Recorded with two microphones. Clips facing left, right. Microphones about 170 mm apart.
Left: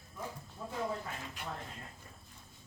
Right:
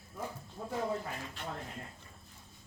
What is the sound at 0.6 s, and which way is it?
Speech, 55° right (ahead or behind).